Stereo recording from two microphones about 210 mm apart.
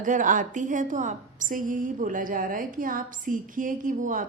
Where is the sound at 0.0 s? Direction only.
40° right (ahead or behind).